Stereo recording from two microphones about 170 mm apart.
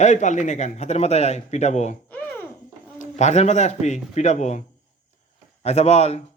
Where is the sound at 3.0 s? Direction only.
45° left (ahead or behind).